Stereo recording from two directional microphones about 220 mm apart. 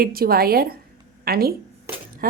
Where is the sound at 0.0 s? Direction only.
40° right (ahead or behind).